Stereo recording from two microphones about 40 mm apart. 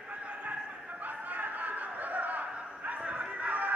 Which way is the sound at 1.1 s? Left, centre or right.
Right.